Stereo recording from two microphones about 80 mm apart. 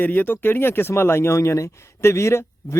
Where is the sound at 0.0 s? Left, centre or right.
Left.